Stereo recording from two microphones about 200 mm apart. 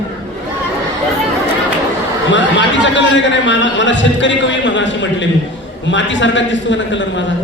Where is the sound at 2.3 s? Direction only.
65° left (ahead or behind).